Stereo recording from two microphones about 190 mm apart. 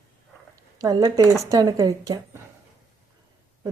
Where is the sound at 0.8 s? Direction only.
20° right (ahead or behind).